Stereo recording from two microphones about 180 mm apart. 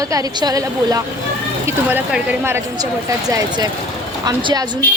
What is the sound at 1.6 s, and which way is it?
A woman's voice, 10° right (ahead or behind).